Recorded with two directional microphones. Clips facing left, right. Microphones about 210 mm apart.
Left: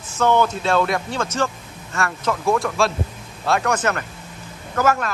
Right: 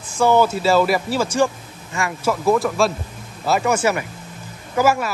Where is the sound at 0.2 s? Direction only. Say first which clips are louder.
Right 2 dB; 10° right (ahead or behind).